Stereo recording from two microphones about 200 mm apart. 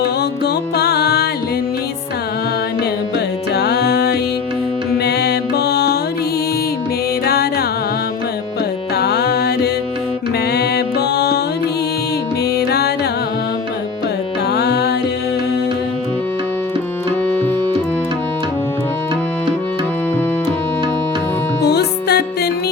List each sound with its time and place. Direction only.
0.0 s music: 55° left (ahead or behind)
3.5 s music: 55° left (ahead or behind)
9.0 s music: 55° left (ahead or behind)
12.5 s music: 55° left (ahead or behind)
14.5 s music: 55° left (ahead or behind)
21.6 s music: 55° left (ahead or behind)